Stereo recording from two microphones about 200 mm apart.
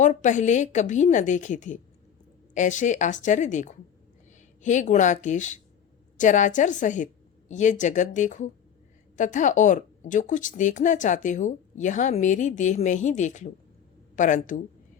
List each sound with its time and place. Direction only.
0.0 s a woman's voice: 40° left (ahead or behind)